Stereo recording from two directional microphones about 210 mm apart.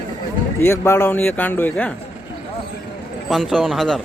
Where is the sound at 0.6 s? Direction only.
10° left (ahead or behind).